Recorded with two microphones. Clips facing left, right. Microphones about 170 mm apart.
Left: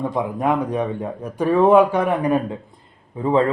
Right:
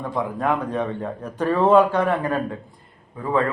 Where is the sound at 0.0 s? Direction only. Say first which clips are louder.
Left 3 dB; 20° left (ahead or behind).